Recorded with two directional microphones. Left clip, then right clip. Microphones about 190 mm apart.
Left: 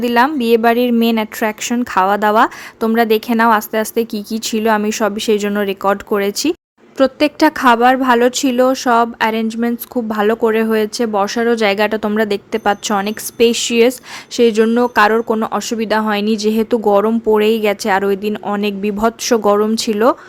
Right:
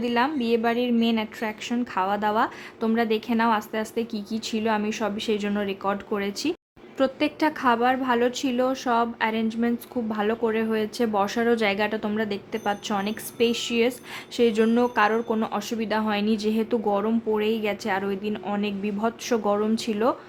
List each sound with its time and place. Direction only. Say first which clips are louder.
0.0 s a woman's voice: left 11 dB; 40° left (ahead or behind)